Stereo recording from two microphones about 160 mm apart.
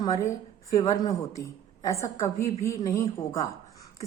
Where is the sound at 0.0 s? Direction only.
20° left (ahead or behind).